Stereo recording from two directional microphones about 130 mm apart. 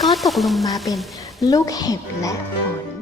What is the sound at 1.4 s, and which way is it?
Speech, 30° left (ahead or behind).